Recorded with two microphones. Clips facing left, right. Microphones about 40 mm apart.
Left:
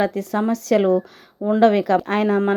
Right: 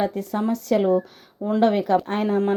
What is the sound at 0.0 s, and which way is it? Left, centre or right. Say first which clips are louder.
A woman's voice: left 3 dB; left.